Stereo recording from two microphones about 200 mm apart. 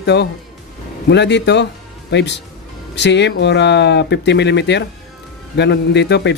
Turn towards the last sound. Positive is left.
turn(degrees=60)  # may be behind; listen again after turning